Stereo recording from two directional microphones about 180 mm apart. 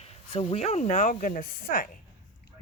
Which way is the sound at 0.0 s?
35° left (ahead or behind).